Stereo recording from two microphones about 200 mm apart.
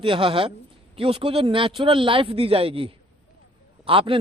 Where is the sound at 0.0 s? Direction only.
25° right (ahead or behind).